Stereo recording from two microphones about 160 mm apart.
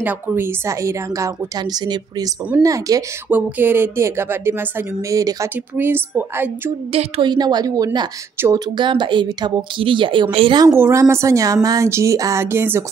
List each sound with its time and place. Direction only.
0.0 s a woman's voice: 10° right (ahead or behind)
3.3 s speech: 10° right (ahead or behind)
6.9 s a woman's voice: 35° right (ahead or behind)
10.7 s a woman's voice: 15° right (ahead or behind)